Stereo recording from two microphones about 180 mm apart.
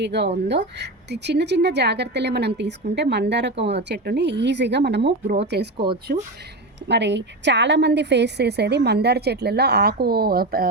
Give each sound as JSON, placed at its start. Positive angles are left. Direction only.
{"t": 0.0, "sound": "speech", "side_deg": -70}
{"t": 6.1, "sound": "speech", "side_deg": -45}
{"t": 6.8, "sound": "speech", "side_deg": -75}